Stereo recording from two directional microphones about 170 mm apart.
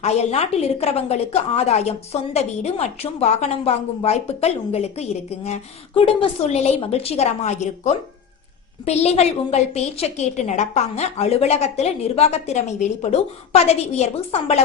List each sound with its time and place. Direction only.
0.0 s a woman's voice: 40° left (ahead or behind)